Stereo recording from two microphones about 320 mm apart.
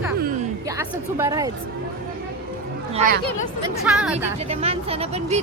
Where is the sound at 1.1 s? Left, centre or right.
Centre.